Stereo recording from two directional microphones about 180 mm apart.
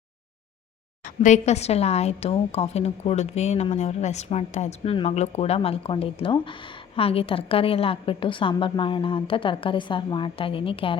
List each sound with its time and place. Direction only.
1.0 s a woman's voice: 40° left (ahead or behind)